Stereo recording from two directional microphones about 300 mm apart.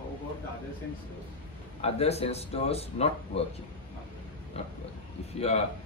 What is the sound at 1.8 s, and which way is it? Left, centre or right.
Speech, centre.